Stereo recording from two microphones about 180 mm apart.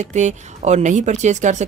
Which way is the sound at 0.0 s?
40° right (ahead or behind).